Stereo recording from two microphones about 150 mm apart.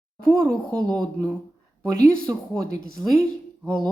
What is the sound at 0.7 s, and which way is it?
Speech, 25° right (ahead or behind).